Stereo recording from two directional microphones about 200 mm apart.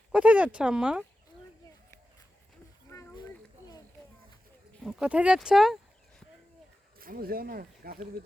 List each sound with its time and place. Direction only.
0.1 s speech: 5° right (ahead or behind)
2.9 s a sound: 15° left (ahead or behind)
4.7 s speech: centre (ahead or behind)
7.0 s speech: 45° right (ahead or behind)